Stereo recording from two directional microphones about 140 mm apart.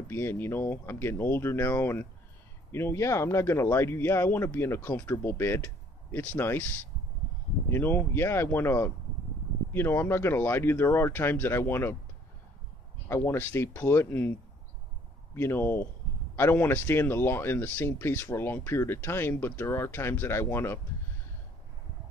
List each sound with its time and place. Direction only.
0.1 s speech: 15° left (ahead or behind)
7.7 s speech: 15° left (ahead or behind)
13.1 s speech: 20° left (ahead or behind)
15.3 s speech: 15° left (ahead or behind)